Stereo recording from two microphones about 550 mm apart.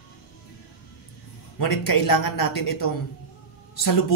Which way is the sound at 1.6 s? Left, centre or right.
Left.